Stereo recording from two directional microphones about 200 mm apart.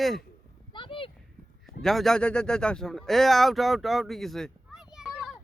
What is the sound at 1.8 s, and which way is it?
Speech, centre (ahead or behind).